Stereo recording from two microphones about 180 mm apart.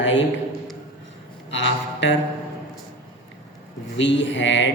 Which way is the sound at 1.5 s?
90° left.